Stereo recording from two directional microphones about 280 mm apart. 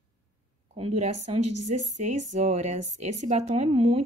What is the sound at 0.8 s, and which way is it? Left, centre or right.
Speech, right.